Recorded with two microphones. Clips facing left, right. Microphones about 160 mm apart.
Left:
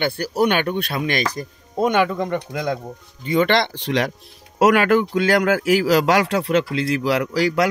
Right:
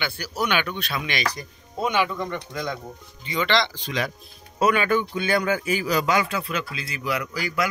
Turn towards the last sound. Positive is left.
turn(degrees=80)